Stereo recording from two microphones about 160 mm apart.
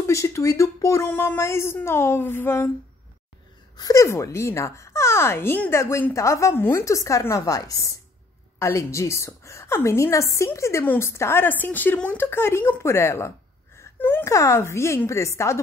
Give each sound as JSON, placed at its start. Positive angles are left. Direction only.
{"t": 0.0, "sound": "speech", "side_deg": 20}
{"t": 3.7, "sound": "speech", "side_deg": 20}